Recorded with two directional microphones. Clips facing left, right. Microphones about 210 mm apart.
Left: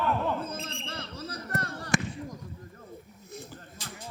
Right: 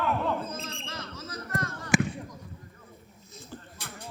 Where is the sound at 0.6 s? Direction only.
30° left (ahead or behind).